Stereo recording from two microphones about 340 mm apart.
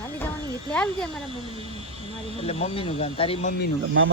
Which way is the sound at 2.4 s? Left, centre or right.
Centre.